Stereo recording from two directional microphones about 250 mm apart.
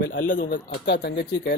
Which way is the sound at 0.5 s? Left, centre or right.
Left.